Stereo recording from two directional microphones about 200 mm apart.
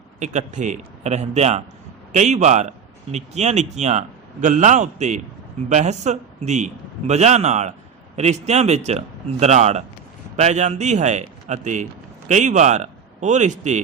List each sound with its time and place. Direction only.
0.2 s speech: 35° right (ahead or behind)